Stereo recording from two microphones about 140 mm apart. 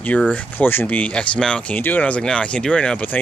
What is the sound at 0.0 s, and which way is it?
Speech, 10° left (ahead or behind).